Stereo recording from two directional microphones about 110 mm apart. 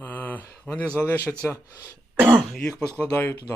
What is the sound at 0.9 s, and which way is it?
Speech, 15° left (ahead or behind).